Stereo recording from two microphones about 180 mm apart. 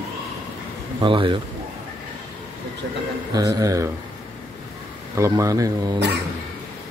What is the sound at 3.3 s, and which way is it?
Speech, 20° right (ahead or behind).